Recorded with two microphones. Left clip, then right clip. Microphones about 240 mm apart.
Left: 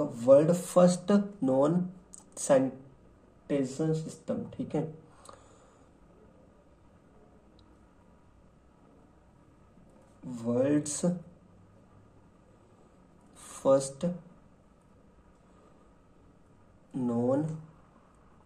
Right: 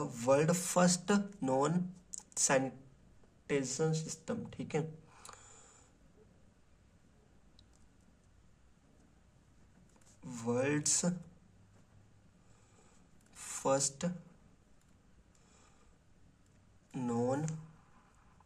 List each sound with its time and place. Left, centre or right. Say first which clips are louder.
0.0 s speech: left 9 dB; right
10.2 s speech: left 6 dB; right
10.8 s speech: left 2 dB; right
13.4 s a sound: left 8 dB; right
17.0 s speech: left 6 dB; right